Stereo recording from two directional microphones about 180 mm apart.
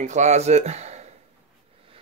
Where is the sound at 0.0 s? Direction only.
40° right (ahead or behind).